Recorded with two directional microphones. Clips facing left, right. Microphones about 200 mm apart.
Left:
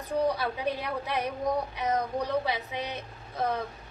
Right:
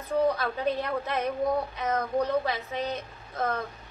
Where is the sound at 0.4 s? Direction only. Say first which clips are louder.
Right 2 dB; 15° left (ahead or behind).